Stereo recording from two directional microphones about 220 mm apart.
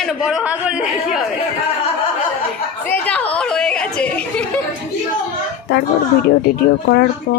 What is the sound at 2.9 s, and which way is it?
Speech, 5° left (ahead or behind).